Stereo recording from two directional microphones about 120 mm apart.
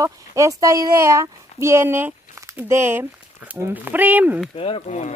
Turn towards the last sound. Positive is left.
turn(degrees=50)  # may be behind; listen again after turning